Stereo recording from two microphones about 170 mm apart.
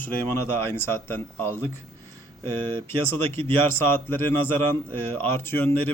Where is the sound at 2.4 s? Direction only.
30° right (ahead or behind).